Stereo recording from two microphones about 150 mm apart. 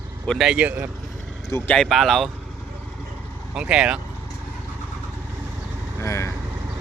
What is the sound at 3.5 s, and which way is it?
Speech, 5° right (ahead or behind).